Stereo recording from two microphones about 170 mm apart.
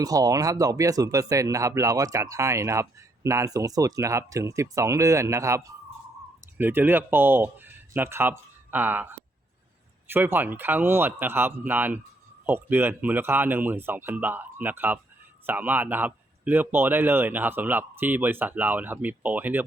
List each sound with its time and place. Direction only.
0.0 s speech: 20° right (ahead or behind)